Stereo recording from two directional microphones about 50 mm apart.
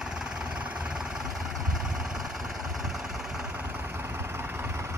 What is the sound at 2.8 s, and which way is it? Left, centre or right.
Vehicle, centre.